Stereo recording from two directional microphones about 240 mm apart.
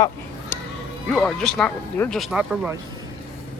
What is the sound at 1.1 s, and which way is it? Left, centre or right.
Speech, centre.